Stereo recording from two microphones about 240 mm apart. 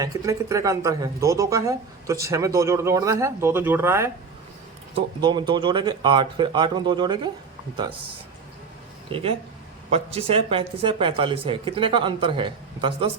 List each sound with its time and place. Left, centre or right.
0.0 s speech: centre
9.1 s speech: right